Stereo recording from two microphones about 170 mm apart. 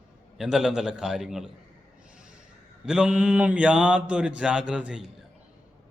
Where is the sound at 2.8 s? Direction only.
5° right (ahead or behind).